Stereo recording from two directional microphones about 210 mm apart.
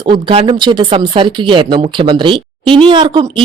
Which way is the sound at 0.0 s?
25° right (ahead or behind).